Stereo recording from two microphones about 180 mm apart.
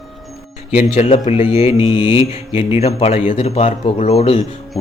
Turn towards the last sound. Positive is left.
turn(degrees=35)  # may be behind; listen again after turning